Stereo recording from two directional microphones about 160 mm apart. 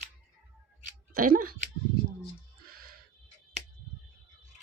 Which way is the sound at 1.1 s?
65° right (ahead or behind).